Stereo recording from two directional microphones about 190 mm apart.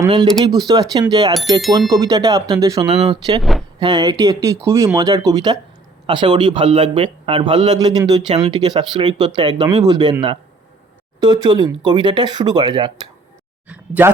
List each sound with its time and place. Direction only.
0.0 s a man's voice: 20° right (ahead or behind)
13.7 s speech: 10° right (ahead or behind)